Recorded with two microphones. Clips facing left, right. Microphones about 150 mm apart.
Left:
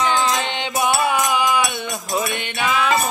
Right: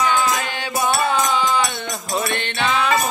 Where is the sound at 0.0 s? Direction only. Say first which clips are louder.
Even; 25° left (ahead or behind).